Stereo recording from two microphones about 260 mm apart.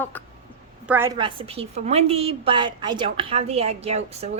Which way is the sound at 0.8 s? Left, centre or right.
Centre.